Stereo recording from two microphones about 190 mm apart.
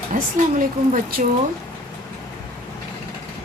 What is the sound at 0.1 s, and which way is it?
Speech, 45° right (ahead or behind).